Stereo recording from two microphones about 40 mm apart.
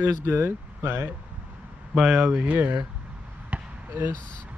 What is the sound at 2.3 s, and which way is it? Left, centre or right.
Speech, right.